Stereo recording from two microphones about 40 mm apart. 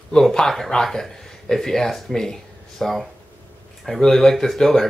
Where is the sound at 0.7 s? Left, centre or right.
Centre.